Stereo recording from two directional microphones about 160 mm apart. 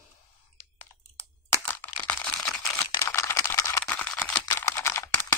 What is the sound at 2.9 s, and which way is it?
Typing, 20° left (ahead or behind).